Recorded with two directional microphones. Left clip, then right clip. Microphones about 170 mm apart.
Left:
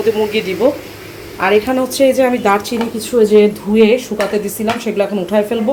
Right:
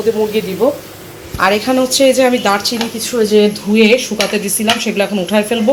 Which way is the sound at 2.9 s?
25° left (ahead or behind).